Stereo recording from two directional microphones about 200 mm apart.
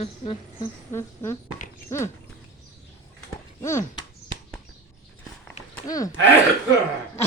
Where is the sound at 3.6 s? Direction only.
15° left (ahead or behind).